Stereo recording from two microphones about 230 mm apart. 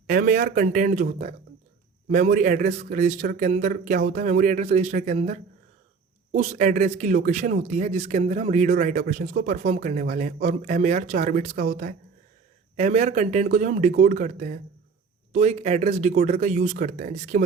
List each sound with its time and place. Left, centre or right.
0.1 s speech: right